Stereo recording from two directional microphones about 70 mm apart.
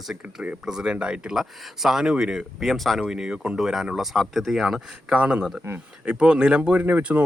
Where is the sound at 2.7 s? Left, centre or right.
Centre.